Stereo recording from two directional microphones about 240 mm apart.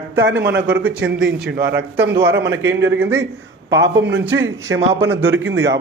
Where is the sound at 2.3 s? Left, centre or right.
Right.